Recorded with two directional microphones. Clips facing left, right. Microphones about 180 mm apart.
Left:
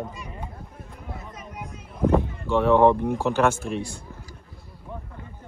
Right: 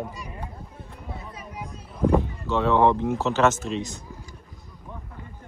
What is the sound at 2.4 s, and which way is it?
Speech, 15° left (ahead or behind).